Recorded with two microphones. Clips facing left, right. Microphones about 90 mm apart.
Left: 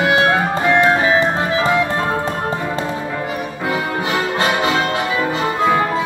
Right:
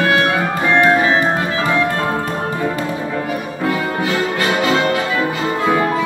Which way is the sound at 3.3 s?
20° left (ahead or behind).